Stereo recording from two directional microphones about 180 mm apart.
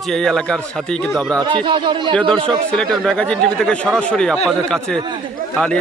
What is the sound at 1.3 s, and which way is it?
Speech, 25° right (ahead or behind).